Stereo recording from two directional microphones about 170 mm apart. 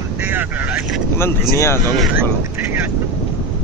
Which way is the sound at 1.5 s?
15° left (ahead or behind).